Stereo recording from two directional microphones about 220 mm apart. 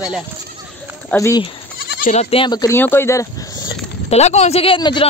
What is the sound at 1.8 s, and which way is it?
Goat, 50° left (ahead or behind).